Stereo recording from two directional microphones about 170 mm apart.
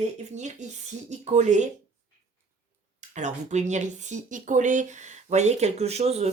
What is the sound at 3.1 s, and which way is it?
Speech, 45° right (ahead or behind).